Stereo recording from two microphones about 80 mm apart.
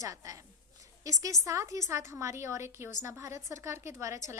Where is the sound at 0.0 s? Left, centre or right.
Right.